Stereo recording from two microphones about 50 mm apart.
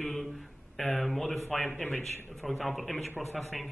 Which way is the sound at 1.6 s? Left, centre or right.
Left.